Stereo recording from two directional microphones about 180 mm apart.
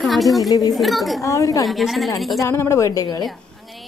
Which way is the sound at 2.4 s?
15° left (ahead or behind).